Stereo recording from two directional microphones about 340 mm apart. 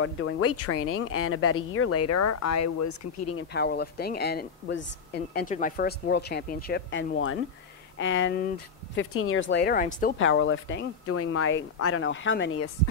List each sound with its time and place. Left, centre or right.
0.0 s speech: left
3.3 s speech: left
10.1 s speech: left